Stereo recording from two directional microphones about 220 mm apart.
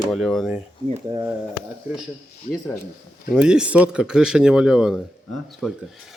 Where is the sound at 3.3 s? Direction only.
5° right (ahead or behind).